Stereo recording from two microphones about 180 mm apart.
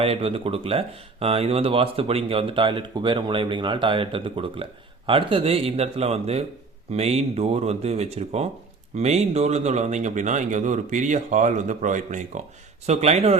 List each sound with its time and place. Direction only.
0.0 s a man's voice: 30° right (ahead or behind)